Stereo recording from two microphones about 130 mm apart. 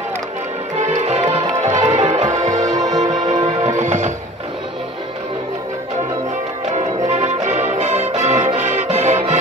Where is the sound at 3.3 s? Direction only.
70° right (ahead or behind).